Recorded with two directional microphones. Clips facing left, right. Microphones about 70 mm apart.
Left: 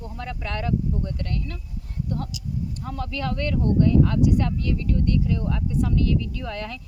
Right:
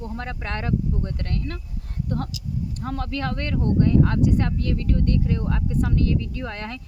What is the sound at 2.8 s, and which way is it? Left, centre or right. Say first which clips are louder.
Speech: right 4 dB; right.